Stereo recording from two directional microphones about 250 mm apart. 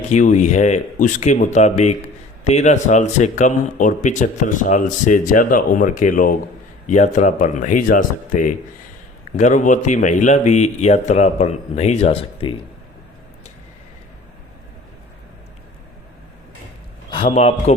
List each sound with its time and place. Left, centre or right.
0.1 s speech: left
17.1 s a man's voice: left